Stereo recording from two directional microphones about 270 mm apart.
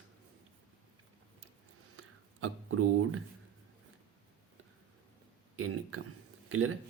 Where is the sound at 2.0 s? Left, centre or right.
Right.